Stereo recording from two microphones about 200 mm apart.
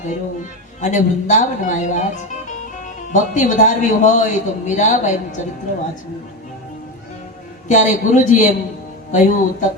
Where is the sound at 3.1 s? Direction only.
40° left (ahead or behind).